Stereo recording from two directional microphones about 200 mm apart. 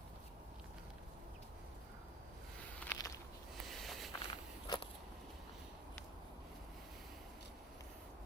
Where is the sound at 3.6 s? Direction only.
Centre (ahead or behind).